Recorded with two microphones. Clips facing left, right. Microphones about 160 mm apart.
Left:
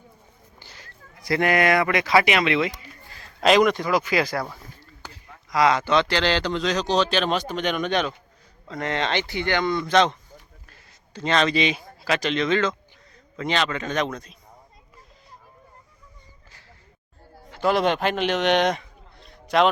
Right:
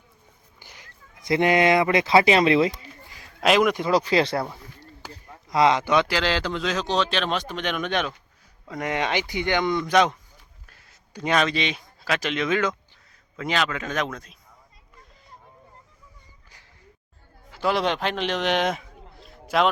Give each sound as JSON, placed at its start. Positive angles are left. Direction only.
{"t": 0.6, "sound": "speech", "side_deg": -15}
{"t": 3.1, "sound": "a sound", "side_deg": -10}
{"t": 3.5, "sound": "speech", "side_deg": -5}
{"t": 3.9, "sound": "speech", "side_deg": -30}
{"t": 8.6, "sound": "speech", "side_deg": -10}
{"t": 10.7, "sound": "a sound", "side_deg": 0}
{"t": 11.1, "sound": "speech", "side_deg": -10}
{"t": 11.4, "sound": "speech", "side_deg": 5}
{"t": 17.5, "sound": "a man's voice", "side_deg": 0}